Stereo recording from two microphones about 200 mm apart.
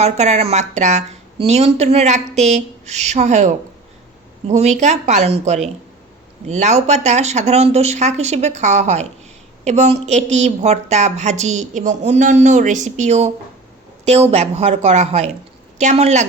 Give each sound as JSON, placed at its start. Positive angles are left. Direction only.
{"t": 0.0, "sound": "a woman's voice", "side_deg": -35}